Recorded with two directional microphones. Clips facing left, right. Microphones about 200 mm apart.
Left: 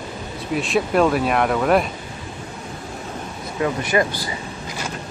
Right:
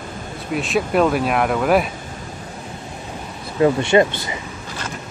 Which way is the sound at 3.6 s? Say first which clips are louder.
Right 6 dB; 25° right (ahead or behind).